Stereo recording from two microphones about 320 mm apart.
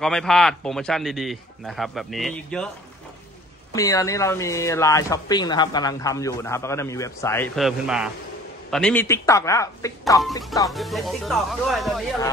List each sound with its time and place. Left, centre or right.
0.0 s a man's voice: centre
3.7 s speech: centre
10.7 s a man's voice: centre